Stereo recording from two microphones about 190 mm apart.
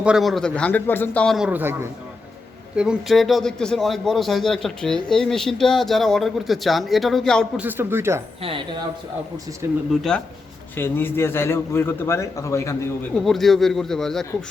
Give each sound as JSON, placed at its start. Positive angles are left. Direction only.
{"t": 0.0, "sound": "a man's voice", "side_deg": -5}
{"t": 7.6, "sound": "speech", "side_deg": -10}
{"t": 8.4, "sound": "speech", "side_deg": -30}
{"t": 9.9, "sound": "a man's voice", "side_deg": 0}
{"t": 13.1, "sound": "a man's voice", "side_deg": 0}